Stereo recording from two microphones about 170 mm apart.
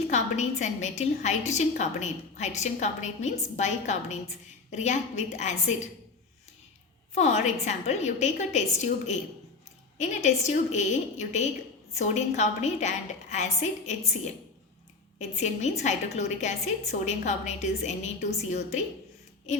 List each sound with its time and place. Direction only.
0.1 s a woman's voice: 45° left (ahead or behind)
7.1 s a woman's voice: 45° left (ahead or behind)
15.2 s a woman's voice: 40° left (ahead or behind)